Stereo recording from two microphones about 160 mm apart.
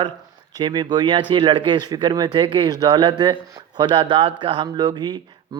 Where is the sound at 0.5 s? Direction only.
25° right (ahead or behind).